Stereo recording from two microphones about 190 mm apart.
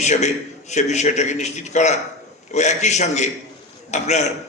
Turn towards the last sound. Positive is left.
turn(degrees=35)  # may be behind; listen again after turning